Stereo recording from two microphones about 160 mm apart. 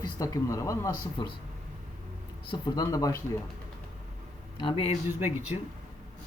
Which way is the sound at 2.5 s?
25° left (ahead or behind).